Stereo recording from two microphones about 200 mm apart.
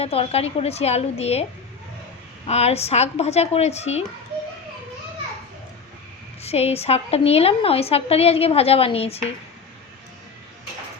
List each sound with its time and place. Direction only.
0.0 s a woman's voice: 30° left (ahead or behind)
2.5 s a woman's voice: 30° left (ahead or behind)
6.4 s a woman's voice: 30° left (ahead or behind)